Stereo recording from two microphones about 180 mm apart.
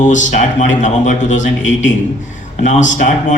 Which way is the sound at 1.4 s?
90° left.